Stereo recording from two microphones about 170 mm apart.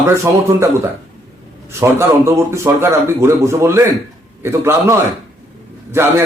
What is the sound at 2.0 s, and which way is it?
A man's voice, 15° right (ahead or behind).